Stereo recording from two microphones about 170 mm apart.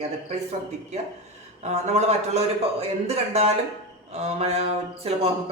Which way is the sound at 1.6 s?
40° right (ahead or behind).